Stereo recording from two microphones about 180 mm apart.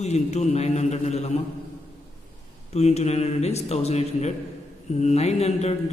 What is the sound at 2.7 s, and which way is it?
A man's voice, 35° left (ahead or behind).